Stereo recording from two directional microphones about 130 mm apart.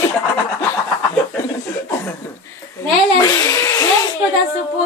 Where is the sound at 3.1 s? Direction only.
30° left (ahead or behind).